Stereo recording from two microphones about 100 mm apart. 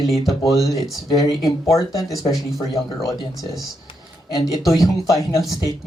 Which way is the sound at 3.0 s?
35° left (ahead or behind).